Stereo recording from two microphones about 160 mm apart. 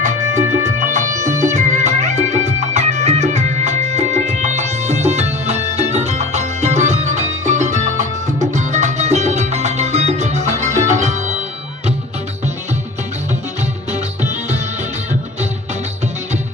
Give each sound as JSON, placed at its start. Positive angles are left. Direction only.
{"t": 0.0, "sound": "music", "side_deg": -50}
{"t": 13.9, "sound": "music", "side_deg": -45}